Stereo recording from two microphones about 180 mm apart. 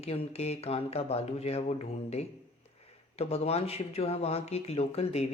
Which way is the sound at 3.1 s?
35° left (ahead or behind).